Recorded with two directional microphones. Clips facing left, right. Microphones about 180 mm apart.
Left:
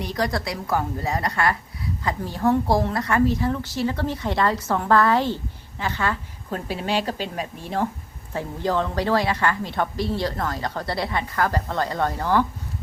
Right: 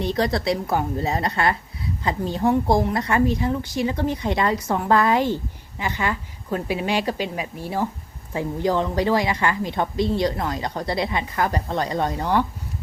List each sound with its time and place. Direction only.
0.0 s a woman's voice: 25° right (ahead or behind)